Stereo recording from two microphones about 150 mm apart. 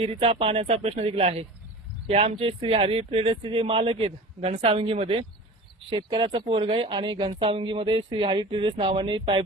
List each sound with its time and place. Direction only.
0.0 s speech: 40° right (ahead or behind)